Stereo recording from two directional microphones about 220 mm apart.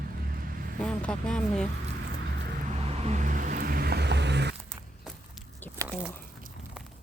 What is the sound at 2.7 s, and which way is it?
Vehicle, 30° right (ahead or behind).